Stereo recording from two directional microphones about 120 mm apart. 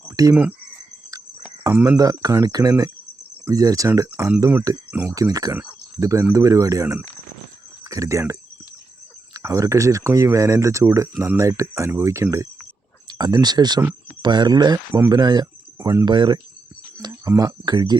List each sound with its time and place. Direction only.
0.2 s speech: 30° right (ahead or behind)
1.6 s speech: 20° right (ahead or behind)
5.1 s speech: 30° right (ahead or behind)
16.0 s speech: 40° right (ahead or behind)